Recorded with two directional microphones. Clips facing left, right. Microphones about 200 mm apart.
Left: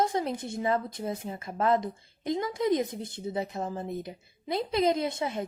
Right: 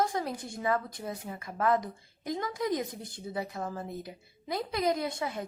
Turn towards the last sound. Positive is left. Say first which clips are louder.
# left 3 dB
turn(degrees=25)  # may be behind; listen again after turning